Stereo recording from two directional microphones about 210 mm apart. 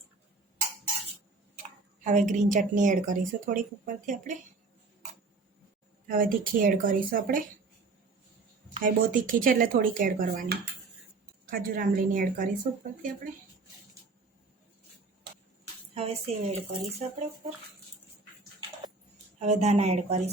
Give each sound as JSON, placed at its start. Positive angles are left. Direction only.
{"t": 2.0, "sound": "speech", "side_deg": -35}
{"t": 6.1, "sound": "speech", "side_deg": -40}
{"t": 8.7, "sound": "a woman's voice", "side_deg": -40}
{"t": 16.0, "sound": "speech", "side_deg": -30}
{"t": 19.4, "sound": "speech", "side_deg": -30}